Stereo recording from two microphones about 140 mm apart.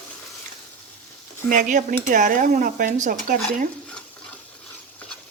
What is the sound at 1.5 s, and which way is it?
Stir, 65° right (ahead or behind).